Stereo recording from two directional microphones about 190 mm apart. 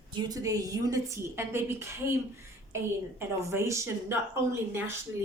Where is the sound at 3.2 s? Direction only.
15° right (ahead or behind).